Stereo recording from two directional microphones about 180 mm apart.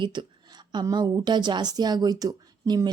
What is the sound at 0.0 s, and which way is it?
Speech, 25° right (ahead or behind).